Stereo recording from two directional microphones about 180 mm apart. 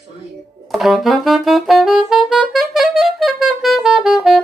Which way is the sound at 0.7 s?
Centre (ahead or behind).